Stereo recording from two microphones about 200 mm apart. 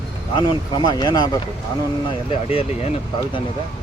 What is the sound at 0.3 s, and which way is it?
Speech, 20° left (ahead or behind).